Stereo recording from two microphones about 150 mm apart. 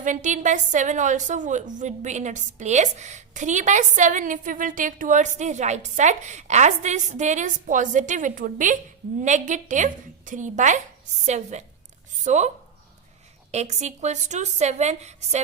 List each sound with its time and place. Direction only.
0.0 s a woman's voice: 55° right (ahead or behind)
13.5 s a woman's voice: 45° right (ahead or behind)